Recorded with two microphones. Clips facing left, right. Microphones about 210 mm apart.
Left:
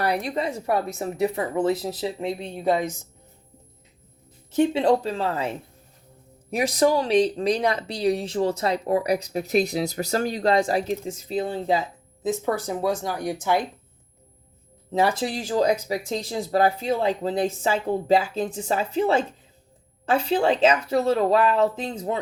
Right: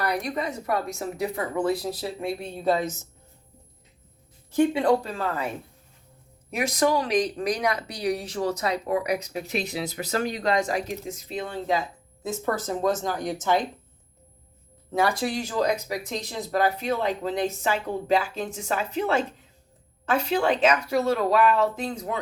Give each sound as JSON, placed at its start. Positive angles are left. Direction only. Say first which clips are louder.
{"t": 0.0, "sound": "speech", "louder": "left 3 dB", "side_deg": 30}
{"t": 4.5, "sound": "speech", "louder": "left 1 dB", "side_deg": 20}
{"t": 6.5, "sound": "speech", "louder": "left 3 dB", "side_deg": 35}
{"t": 12.2, "sound": "speech", "louder": "left 3 dB", "side_deg": 15}
{"t": 14.9, "sound": "speech", "louder": "left 2 dB", "side_deg": 25}